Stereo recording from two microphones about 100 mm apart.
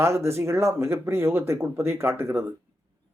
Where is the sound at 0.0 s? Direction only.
25° right (ahead or behind).